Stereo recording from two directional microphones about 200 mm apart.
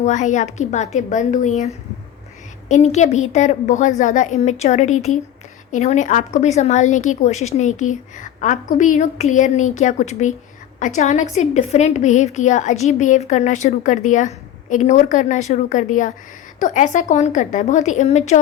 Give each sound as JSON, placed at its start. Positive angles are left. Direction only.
{"t": 0.0, "sound": "a woman's voice", "side_deg": 35}